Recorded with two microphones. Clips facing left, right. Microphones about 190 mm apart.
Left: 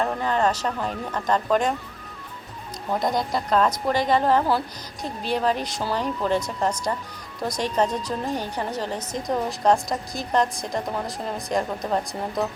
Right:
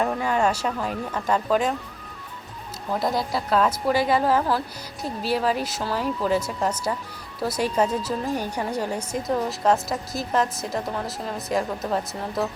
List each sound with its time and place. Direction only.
0.2 s speech: 10° right (ahead or behind)
2.9 s a woman's voice: 5° right (ahead or behind)